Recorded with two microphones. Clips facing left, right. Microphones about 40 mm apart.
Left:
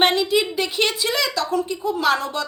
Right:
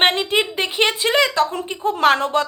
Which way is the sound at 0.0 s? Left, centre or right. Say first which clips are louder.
Right 1 dB; right.